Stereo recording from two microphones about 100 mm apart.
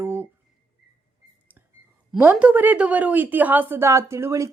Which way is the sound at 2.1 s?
15° right (ahead or behind).